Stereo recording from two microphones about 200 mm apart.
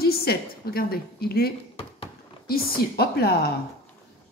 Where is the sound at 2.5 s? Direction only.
50° left (ahead or behind).